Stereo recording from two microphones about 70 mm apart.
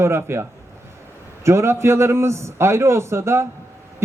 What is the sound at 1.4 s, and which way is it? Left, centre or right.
Speech, right.